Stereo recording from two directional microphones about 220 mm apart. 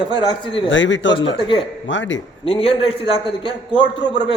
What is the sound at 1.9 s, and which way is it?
Speech, 60° left (ahead or behind).